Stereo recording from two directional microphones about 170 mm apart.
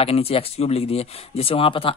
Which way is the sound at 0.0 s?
35° left (ahead or behind).